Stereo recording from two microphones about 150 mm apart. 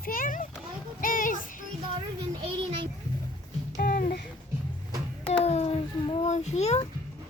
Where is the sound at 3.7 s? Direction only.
65° left (ahead or behind); by 4.1 s 80° left.